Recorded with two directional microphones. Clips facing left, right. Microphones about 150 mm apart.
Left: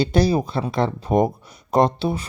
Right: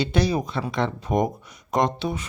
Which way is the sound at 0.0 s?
35° left (ahead or behind).